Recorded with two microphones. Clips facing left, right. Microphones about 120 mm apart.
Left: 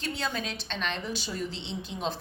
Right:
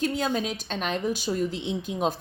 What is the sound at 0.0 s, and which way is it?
Speech, 45° right (ahead or behind).